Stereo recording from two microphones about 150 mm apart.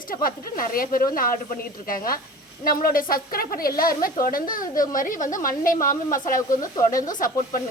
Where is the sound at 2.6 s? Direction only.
70° left (ahead or behind).